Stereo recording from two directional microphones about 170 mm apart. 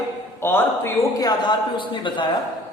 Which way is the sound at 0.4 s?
15° left (ahead or behind).